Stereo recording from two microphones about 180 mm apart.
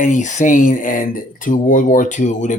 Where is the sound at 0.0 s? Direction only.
45° left (ahead or behind).